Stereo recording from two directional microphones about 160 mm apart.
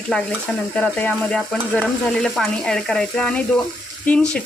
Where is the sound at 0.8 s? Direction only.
10° left (ahead or behind).